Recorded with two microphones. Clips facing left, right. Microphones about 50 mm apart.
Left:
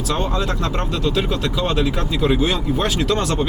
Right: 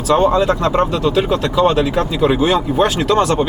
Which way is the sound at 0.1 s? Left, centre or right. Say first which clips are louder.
Right 10 dB; centre.